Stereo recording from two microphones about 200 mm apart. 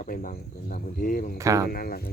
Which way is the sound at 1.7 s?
50° left (ahead or behind).